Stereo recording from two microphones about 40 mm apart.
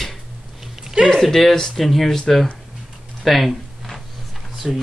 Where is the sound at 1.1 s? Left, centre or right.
Centre.